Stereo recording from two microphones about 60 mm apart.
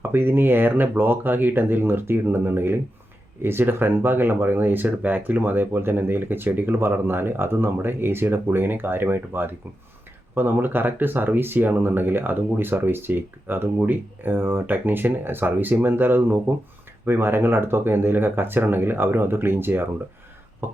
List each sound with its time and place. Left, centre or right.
0.0 s speech: right